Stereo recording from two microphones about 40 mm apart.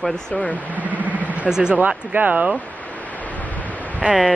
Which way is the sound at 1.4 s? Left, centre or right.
Centre.